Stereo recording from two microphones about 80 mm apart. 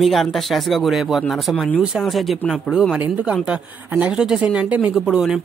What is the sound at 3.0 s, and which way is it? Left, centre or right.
Speech, centre.